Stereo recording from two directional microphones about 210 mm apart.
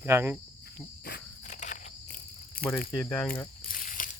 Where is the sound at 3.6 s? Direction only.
40° left (ahead or behind).